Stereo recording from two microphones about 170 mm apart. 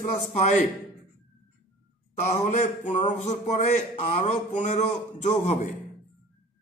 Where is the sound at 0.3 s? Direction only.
40° left (ahead or behind).